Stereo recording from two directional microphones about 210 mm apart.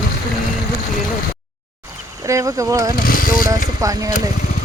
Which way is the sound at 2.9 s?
40° left (ahead or behind).